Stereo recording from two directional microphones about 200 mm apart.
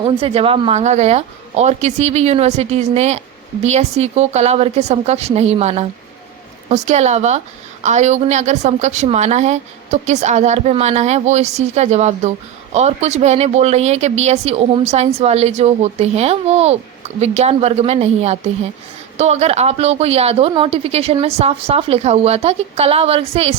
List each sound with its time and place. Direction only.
0.0 s speech: 25° right (ahead or behind)